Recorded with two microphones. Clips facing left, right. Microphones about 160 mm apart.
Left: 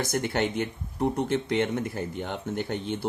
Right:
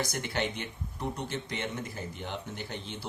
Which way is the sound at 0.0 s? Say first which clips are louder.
Left 6 dB; 50° left (ahead or behind).